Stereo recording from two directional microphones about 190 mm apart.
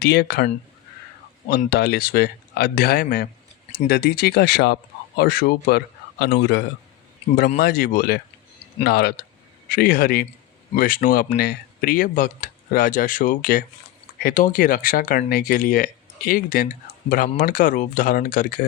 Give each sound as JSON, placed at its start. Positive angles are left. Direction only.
{"t": 0.0, "sound": "speech", "side_deg": 55}
{"t": 1.5, "sound": "speech", "side_deg": 55}
{"t": 7.6, "sound": "speech", "side_deg": 50}